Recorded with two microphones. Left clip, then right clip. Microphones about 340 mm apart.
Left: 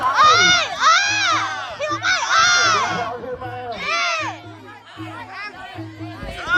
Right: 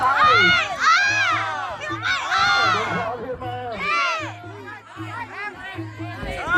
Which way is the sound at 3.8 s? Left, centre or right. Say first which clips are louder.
Left 1 dB; centre.